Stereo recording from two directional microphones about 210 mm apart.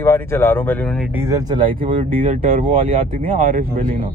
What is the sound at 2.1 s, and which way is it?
Speech, 40° right (ahead or behind).